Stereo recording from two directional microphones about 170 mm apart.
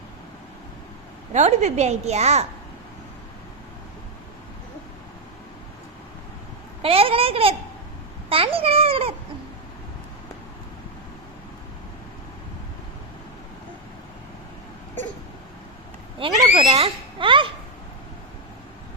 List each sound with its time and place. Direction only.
1.3 s a woman's voice: 40° right (ahead or behind)
6.8 s a woman's voice: 35° right (ahead or behind)
16.2 s a woman's voice: 30° right (ahead or behind)